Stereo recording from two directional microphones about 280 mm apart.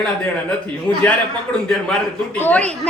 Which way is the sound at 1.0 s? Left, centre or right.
Centre.